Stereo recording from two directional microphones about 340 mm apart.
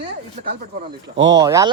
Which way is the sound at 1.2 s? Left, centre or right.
Centre.